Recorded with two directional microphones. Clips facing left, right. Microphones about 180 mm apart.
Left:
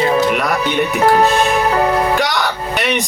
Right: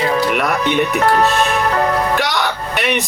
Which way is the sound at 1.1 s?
15° left (ahead or behind).